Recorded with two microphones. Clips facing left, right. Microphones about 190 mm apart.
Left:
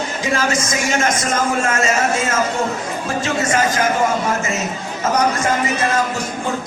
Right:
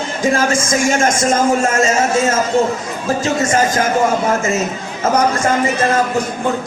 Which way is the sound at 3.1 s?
40° right (ahead or behind).